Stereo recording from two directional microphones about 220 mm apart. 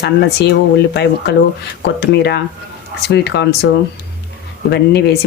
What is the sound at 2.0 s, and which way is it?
Speech, 50° left (ahead or behind).